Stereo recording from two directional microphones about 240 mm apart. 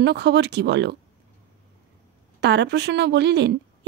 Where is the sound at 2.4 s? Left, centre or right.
Right.